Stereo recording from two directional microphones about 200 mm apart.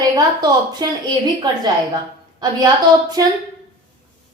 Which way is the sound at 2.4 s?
20° right (ahead or behind).